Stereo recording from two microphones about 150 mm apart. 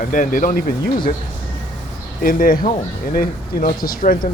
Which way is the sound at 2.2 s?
70° left (ahead or behind).